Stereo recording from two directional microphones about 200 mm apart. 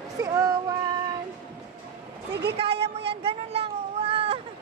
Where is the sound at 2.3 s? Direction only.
55° right (ahead or behind).